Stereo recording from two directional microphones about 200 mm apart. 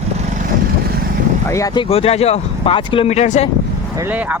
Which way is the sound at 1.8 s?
30° left (ahead or behind).